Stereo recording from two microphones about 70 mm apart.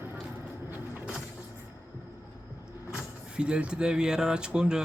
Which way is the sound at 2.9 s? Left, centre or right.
Centre.